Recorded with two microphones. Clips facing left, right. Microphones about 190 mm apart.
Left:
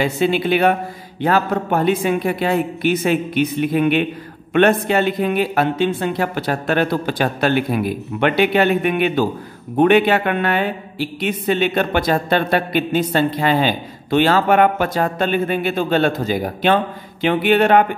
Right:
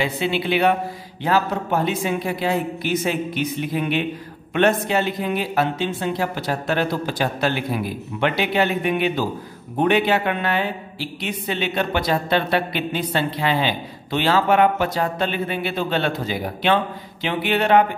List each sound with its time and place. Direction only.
0.0 s speech: 45° left (ahead or behind)